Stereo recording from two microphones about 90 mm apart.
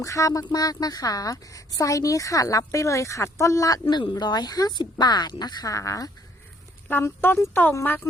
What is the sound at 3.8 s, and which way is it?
Speech, 75° left (ahead or behind).